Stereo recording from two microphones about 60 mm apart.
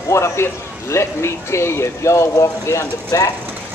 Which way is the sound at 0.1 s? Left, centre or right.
Left.